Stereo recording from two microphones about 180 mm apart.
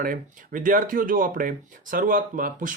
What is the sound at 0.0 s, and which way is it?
Speech, 50° right (ahead or behind).